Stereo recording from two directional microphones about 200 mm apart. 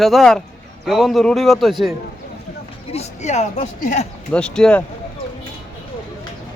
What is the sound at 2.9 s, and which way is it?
Speech, 35° left (ahead or behind).